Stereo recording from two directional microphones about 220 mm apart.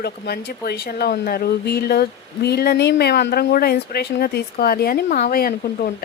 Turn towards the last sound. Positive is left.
turn(degrees=40)  # may be behind; listen again after turning